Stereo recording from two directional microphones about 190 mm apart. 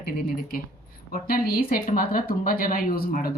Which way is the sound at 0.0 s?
50° left (ahead or behind).